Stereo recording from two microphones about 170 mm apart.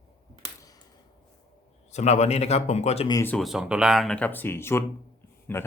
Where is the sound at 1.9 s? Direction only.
40° left (ahead or behind).